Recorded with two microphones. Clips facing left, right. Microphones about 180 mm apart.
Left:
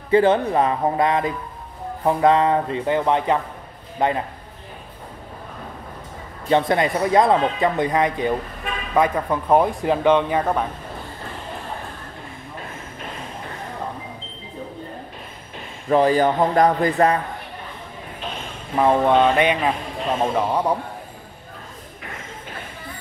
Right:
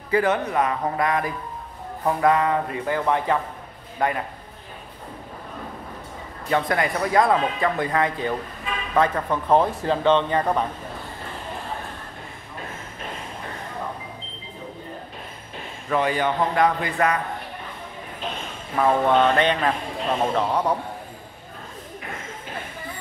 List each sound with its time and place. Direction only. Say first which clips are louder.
0.1 s speech: left 5 dB; 30° left (ahead or behind)
6.5 s speech: left 4 dB; 25° left (ahead or behind); by 10.7 s 5° left (ahead or behind)
15.9 s a man's voice: left 6 dB; 35° left (ahead or behind)
18.8 s speech: left 2 dB; 20° left (ahead or behind)